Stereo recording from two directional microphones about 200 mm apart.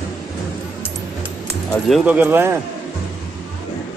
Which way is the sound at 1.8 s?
5° right (ahead or behind).